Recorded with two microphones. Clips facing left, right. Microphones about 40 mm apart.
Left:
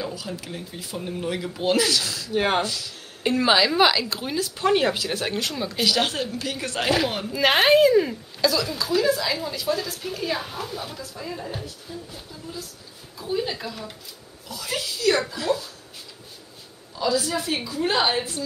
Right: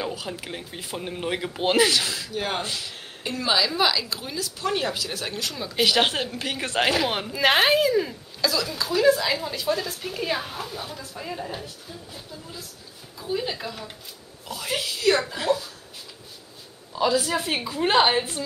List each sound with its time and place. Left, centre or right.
0.0 s a sound: right
0.3 s speech: right
2.3 s speech: left
2.6 s a woman's voice: right
3.3 s speech: left
5.4 s speech: centre
5.9 s speech: right
7.2 s speech: centre
11.0 s speech: centre
11.3 s speech: centre
13.2 s speech: centre
14.5 s a woman's voice: right
16.9 s a woman's voice: right